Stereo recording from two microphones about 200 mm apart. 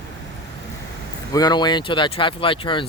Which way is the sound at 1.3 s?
20° left (ahead or behind).